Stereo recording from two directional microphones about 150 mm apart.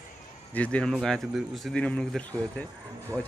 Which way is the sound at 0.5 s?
10° left (ahead or behind).